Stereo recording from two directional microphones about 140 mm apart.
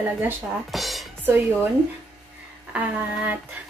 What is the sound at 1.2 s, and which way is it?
Speech, 15° right (ahead or behind).